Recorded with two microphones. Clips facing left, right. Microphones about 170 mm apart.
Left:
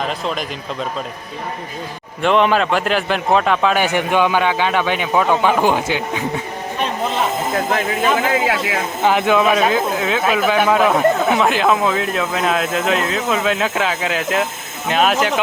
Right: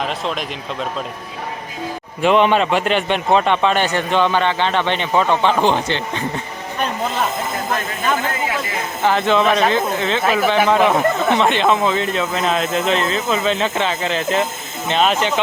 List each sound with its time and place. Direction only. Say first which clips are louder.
2.2 s a man's voice: right 1 dB; centre (ahead or behind)
8.3 s speech: left 5 dB; 90° left
9.0 s speech: left 1 dB; 10° left (ahead or behind)